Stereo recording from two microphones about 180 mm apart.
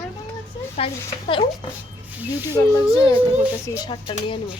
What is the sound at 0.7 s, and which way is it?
Speech, 30° left (ahead or behind).